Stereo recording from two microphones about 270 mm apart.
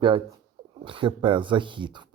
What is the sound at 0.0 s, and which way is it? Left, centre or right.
Speech, centre.